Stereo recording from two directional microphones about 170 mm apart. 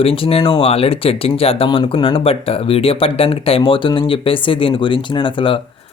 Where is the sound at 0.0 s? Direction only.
35° left (ahead or behind).